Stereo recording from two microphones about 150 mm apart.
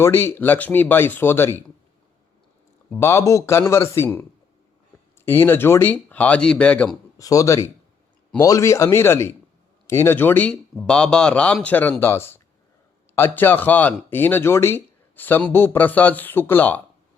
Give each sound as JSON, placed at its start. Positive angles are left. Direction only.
{"t": 0.0, "sound": "speech", "side_deg": 15}
{"t": 2.9, "sound": "speech", "side_deg": 15}
{"t": 7.2, "sound": "speech", "side_deg": 20}